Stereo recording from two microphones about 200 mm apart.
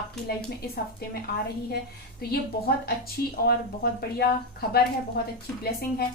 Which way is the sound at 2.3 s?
50° left (ahead or behind).